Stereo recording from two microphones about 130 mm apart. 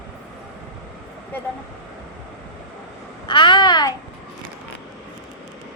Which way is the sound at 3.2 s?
40° left (ahead or behind).